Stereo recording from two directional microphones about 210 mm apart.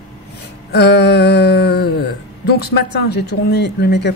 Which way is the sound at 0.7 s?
50° left (ahead or behind).